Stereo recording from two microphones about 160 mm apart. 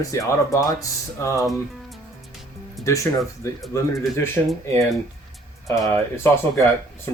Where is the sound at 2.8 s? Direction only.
20° left (ahead or behind).